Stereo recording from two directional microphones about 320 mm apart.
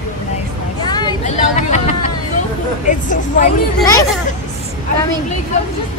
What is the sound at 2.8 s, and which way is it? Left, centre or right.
Vehicle, left.